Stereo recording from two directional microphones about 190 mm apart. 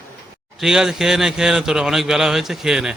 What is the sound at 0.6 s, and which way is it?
Speech, 5° right (ahead or behind).